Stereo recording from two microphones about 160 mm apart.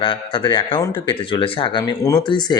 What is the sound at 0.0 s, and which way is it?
Speech, 30° left (ahead or behind).